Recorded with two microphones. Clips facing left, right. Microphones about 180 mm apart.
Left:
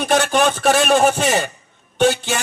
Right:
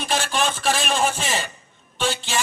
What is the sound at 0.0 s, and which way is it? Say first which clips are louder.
A man's voice: left 8 dB; 60° left (ahead or behind).